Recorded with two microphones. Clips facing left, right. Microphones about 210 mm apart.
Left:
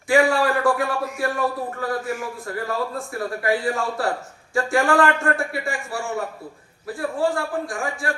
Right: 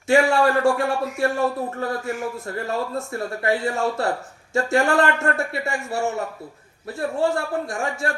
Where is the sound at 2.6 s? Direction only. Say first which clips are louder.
Right 1 dB; 25° right (ahead or behind).